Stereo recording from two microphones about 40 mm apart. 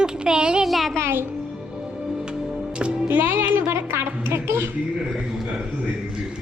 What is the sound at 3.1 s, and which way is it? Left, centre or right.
Speech, right.